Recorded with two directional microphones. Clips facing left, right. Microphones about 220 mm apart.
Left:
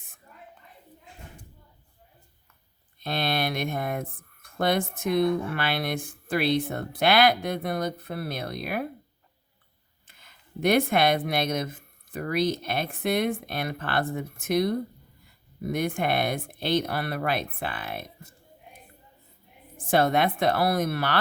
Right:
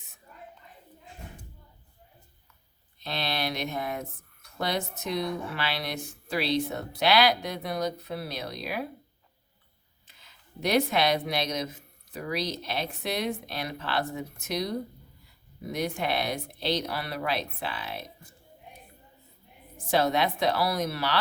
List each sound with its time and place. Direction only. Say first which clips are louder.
3.0 s speech: left 4 dB; 50° left (ahead or behind)
10.1 s speech: left 8 dB; 50° left (ahead or behind)
19.7 s speech: left 3 dB; 50° left (ahead or behind)